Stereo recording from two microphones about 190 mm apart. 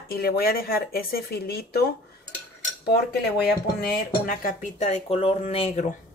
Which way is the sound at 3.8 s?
55° left (ahead or behind).